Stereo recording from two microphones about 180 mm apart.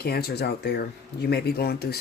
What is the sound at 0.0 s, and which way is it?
Speech, 60° left (ahead or behind).